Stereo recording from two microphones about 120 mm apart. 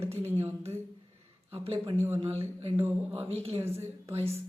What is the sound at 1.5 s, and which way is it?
Speech, 55° right (ahead or behind).